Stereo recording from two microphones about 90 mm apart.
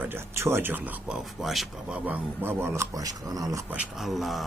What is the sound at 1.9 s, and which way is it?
Speech, 15° right (ahead or behind).